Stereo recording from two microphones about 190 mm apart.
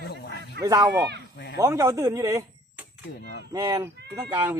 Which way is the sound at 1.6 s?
20° right (ahead or behind).